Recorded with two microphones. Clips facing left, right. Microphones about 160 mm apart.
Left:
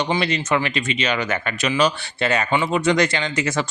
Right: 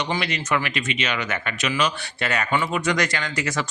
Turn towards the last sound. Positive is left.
turn(degrees=25)  # may be behind; listen again after turning